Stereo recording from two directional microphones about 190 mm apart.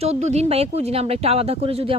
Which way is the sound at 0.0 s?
35° right (ahead or behind).